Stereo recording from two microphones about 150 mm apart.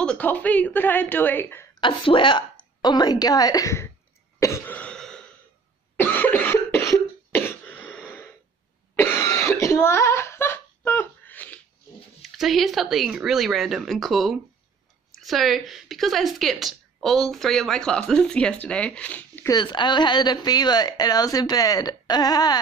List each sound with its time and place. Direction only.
0.0 s a woman's voice: 10° left (ahead or behind)
1.8 s a woman's voice: 35° left (ahead or behind)
4.4 s cough: 15° left (ahead or behind)
12.2 s a woman's voice: centre (ahead or behind)
19.5 s a woman's voice: 30° left (ahead or behind)